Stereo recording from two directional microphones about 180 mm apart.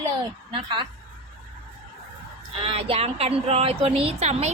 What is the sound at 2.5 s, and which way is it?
A woman's voice, 30° right (ahead or behind).